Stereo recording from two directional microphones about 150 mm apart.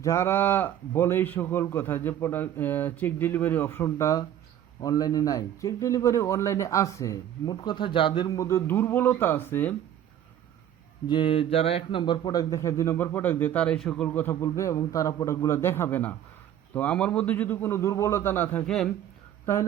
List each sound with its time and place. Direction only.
0.0 s a man's voice: 20° left (ahead or behind)
7.5 s a man's voice: 30° left (ahead or behind); by 9.7 s 15° left (ahead or behind)
11.1 s a man's voice: 35° left (ahead or behind); by 18.9 s 5° left (ahead or behind)